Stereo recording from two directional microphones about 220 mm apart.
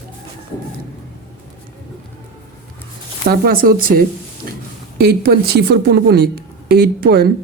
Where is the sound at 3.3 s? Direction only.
40° right (ahead or behind).